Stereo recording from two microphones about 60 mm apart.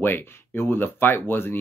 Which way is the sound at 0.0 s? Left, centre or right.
Left.